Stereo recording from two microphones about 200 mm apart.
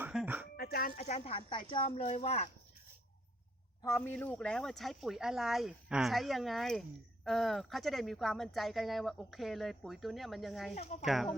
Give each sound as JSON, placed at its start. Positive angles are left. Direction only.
{"t": 0.0, "sound": "a sound", "side_deg": -5}
{"t": 0.5, "sound": "dog", "side_deg": 50}
{"t": 0.9, "sound": "speech", "side_deg": 35}
{"t": 3.8, "sound": "a woman's voice", "side_deg": 10}
{"t": 10.8, "sound": "speech", "side_deg": 35}
{"t": 11.0, "sound": "a woman's voice", "side_deg": 0}